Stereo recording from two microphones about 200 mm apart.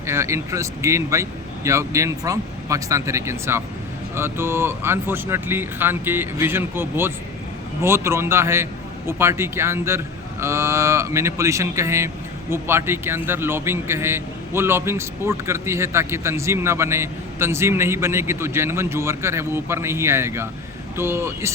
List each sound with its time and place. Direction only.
0.0 s speech: 15° right (ahead or behind)